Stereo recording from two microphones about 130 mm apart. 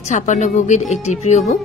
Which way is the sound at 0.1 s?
65° left (ahead or behind).